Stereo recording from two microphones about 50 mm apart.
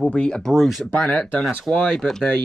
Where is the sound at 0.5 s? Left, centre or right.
Centre.